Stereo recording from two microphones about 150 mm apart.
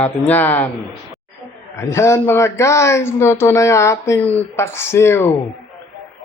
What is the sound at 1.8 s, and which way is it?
Speech, 20° left (ahead or behind).